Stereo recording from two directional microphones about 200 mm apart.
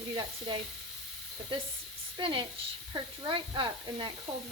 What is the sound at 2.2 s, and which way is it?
Speech, 25° right (ahead or behind).